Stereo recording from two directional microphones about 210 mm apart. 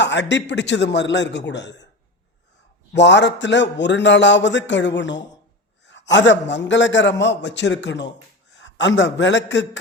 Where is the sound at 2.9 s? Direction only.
55° left (ahead or behind).